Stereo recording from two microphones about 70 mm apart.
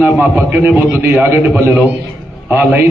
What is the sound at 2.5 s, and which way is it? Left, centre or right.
Speech, right.